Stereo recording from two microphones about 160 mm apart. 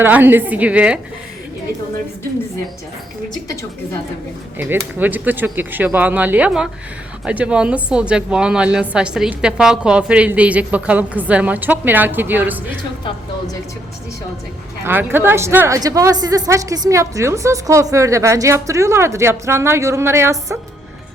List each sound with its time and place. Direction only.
0.0 s a woman's voice: 10° right (ahead or behind)
4.5 s a woman's voice: 10° right (ahead or behind)
14.8 s a woman's voice: 15° right (ahead or behind)